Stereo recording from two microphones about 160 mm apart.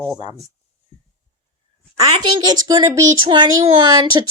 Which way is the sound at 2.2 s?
30° right (ahead or behind).